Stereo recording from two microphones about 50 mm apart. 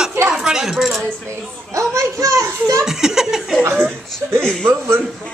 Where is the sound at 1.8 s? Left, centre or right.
Right.